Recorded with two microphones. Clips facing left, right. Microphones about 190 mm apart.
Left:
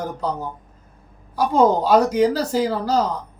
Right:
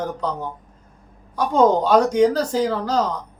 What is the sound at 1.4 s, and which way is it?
Speech, 5° left (ahead or behind).